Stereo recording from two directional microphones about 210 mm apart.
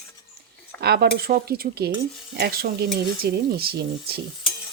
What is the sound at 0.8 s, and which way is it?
Speech, 50° right (ahead or behind).